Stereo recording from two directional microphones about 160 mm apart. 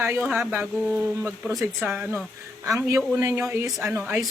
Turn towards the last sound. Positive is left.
turn(degrees=-15)  # may be behind; listen again after turning